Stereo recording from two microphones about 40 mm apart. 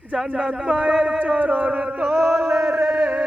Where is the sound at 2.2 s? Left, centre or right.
Centre.